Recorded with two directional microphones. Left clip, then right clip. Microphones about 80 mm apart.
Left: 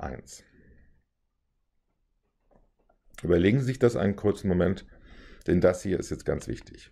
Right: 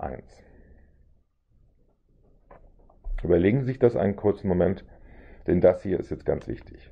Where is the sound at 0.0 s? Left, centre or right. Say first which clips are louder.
Right 3 dB; left.